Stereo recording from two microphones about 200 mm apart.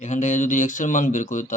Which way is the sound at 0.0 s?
35° left (ahead or behind).